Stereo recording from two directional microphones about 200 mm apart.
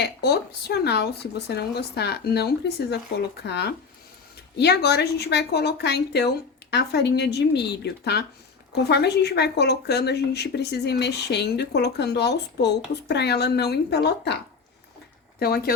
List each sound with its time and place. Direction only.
0.0 s speech: 55° left (ahead or behind)
15.4 s speech: 50° left (ahead or behind)